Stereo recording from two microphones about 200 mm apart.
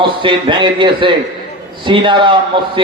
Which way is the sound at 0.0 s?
25° right (ahead or behind).